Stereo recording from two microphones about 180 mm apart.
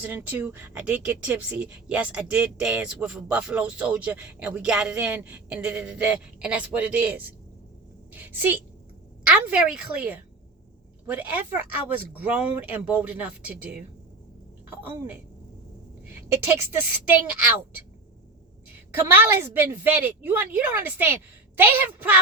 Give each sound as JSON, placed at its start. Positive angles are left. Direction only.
{"t": 0.0, "sound": "a woman's voice", "side_deg": -10}
{"t": 16.3, "sound": "speech", "side_deg": -15}
{"t": 18.9, "sound": "speech", "side_deg": -10}